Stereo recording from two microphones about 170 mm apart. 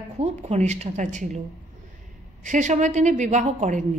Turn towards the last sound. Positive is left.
turn(degrees=-45)  # may be behind; listen again after turning